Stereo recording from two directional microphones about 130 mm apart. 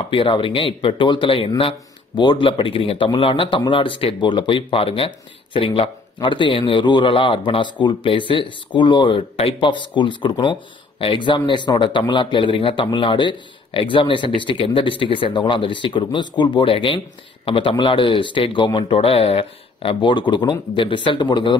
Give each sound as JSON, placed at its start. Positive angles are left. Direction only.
{"t": 0.1, "sound": "speech", "side_deg": 40}